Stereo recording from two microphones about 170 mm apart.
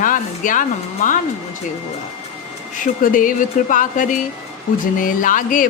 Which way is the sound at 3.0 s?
50° left (ahead or behind).